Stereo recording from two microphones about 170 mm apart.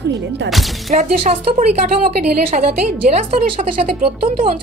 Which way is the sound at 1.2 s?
35° right (ahead or behind).